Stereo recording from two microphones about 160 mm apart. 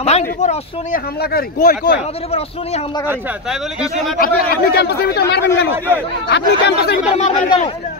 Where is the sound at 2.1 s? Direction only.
40° left (ahead or behind).